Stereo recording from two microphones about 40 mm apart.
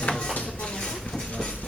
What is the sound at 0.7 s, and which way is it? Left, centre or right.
Train, centre.